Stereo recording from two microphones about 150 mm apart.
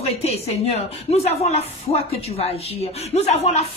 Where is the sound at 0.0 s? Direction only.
45° left (ahead or behind).